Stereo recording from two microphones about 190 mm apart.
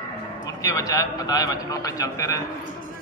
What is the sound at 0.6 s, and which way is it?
A man's voice, 20° left (ahead or behind).